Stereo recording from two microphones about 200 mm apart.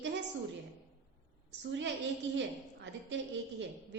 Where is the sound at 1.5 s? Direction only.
65° right (ahead or behind).